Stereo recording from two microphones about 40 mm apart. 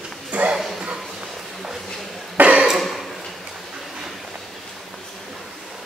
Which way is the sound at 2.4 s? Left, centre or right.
Right.